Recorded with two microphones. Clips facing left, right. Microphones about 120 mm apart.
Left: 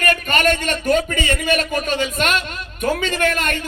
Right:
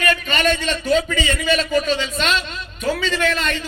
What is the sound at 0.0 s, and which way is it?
A man's voice, 50° left (ahead or behind).